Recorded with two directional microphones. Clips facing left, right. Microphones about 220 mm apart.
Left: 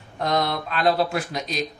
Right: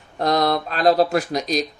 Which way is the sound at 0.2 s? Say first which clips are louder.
Right 4 dB; 40° right (ahead or behind).